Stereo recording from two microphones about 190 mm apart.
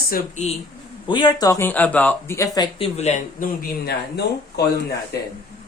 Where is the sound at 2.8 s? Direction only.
35° left (ahead or behind).